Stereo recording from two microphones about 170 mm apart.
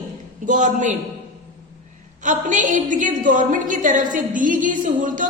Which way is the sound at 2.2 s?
50° right (ahead or behind).